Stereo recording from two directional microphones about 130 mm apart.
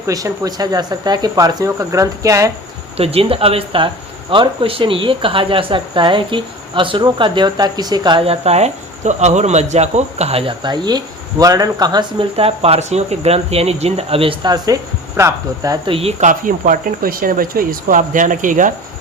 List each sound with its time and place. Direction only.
0.1 s speech: 30° right (ahead or behind)
3.0 s speech: 50° right (ahead or behind); by 8.2 s 35° right (ahead or behind)
8.2 s speech: 50° right (ahead or behind); by 12.0 s 30° right (ahead or behind)
12.4 s speech: 50° right (ahead or behind)
14.4 s speech: 30° right (ahead or behind)
15.9 s speech: 45° right (ahead or behind)
16.2 s speech: 90° right